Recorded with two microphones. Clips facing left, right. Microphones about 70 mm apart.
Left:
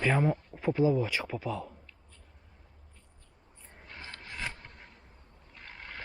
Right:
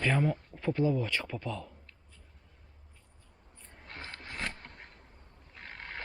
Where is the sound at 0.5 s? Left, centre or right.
Centre.